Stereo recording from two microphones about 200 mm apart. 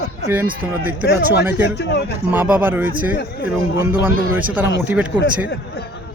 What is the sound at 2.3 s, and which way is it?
Speech, 10° right (ahead or behind).